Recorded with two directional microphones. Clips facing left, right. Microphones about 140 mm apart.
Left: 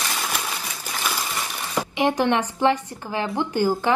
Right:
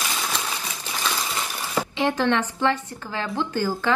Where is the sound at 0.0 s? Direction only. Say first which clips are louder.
Even; centre (ahead or behind).